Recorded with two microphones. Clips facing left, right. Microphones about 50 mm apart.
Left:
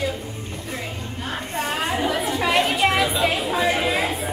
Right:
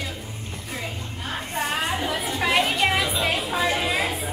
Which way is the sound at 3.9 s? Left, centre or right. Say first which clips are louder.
Left 2 dB; centre.